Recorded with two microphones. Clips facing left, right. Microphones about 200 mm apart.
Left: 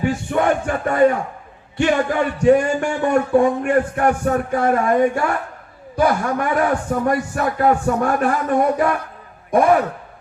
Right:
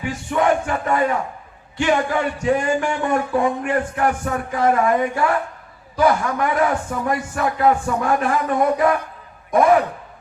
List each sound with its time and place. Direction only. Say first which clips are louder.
0.0 s speech: left 2 dB; 55° left (ahead or behind)